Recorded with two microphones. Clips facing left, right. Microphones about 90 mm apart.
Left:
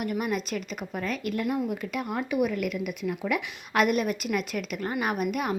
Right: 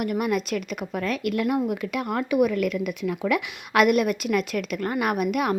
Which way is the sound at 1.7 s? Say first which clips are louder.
Right 4 dB; 75° right (ahead or behind).